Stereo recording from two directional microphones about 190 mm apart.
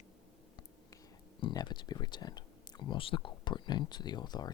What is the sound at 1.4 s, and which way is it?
Speech, 25° left (ahead or behind).